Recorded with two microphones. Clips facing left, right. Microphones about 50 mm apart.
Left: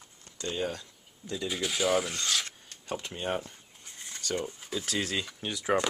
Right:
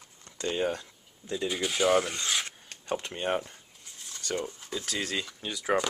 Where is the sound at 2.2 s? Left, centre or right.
Centre.